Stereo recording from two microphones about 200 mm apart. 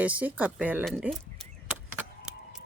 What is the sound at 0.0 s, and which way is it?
Speech, 5° right (ahead or behind).